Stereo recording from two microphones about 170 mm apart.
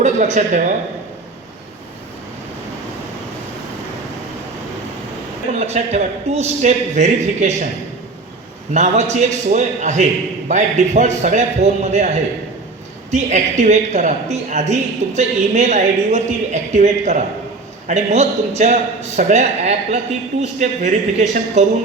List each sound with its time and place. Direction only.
0.0 s a man's voice: 45° right (ahead or behind)
5.5 s a man's voice: 40° right (ahead or behind)
8.7 s a man's voice: 45° right (ahead or behind)